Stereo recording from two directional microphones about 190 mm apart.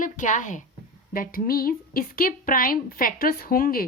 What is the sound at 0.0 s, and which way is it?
A woman's voice, 40° left (ahead or behind).